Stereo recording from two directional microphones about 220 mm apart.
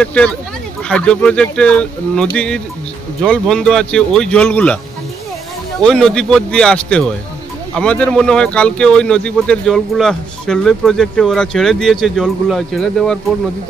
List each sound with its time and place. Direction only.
0.0 s speech: 5° left (ahead or behind)
5.8 s speech: 5° left (ahead or behind)